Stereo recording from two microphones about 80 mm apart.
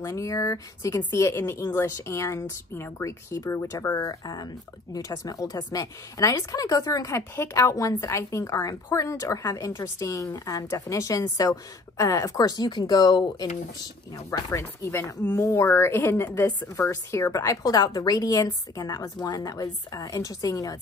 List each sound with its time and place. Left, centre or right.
0.0 s a woman's voice: left
14.1 s a woman's voice: left